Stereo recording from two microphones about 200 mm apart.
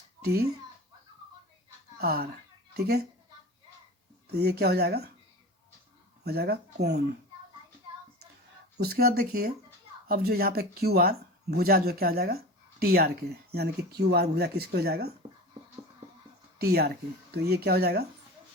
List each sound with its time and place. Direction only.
0.2 s a child's voice: 50° right (ahead or behind)
2.0 s speech: 50° right (ahead or behind)
4.3 s speech: 55° right (ahead or behind)
6.2 s speech: 55° right (ahead or behind)
8.8 s speech: 50° right (ahead or behind)
16.6 s speech: 50° right (ahead or behind)